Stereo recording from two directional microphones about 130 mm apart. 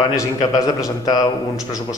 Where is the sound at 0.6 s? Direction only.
30° left (ahead or behind).